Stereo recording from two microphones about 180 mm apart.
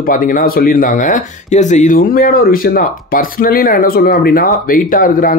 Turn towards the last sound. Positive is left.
turn(degrees=50)  # may be behind; listen again after turning